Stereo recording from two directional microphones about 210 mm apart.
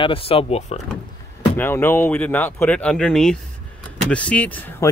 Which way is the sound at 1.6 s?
10° left (ahead or behind).